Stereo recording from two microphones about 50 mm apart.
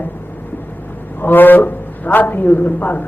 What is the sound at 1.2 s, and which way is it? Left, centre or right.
A man's voice, left.